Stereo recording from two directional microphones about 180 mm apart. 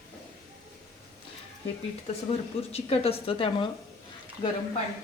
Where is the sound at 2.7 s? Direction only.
35° left (ahead or behind).